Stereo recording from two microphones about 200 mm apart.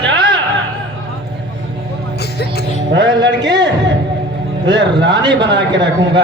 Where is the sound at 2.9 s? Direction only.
60° right (ahead or behind).